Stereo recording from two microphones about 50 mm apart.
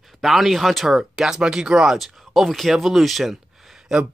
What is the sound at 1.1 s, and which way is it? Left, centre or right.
Speech, centre.